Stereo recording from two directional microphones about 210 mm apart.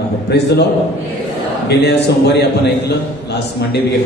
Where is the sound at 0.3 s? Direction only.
55° left (ahead or behind).